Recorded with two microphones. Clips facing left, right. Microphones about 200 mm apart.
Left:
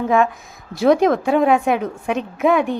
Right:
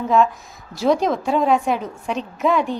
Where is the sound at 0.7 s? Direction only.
55° left (ahead or behind).